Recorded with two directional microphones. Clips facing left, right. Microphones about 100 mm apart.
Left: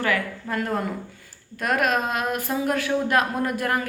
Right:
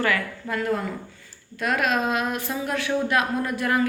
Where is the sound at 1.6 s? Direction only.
45° left (ahead or behind).